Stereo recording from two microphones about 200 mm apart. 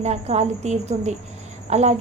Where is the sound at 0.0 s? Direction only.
35° right (ahead or behind).